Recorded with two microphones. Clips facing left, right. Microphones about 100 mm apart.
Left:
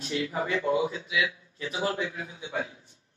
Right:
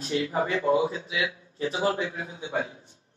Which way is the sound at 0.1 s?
35° right (ahead or behind).